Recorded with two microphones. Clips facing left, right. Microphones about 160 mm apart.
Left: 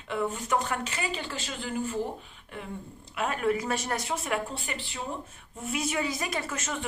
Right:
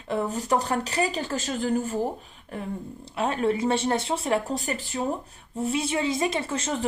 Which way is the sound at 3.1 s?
30° right (ahead or behind).